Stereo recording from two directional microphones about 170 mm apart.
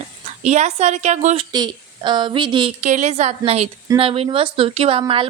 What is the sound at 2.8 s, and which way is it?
A woman's voice, 45° right (ahead or behind).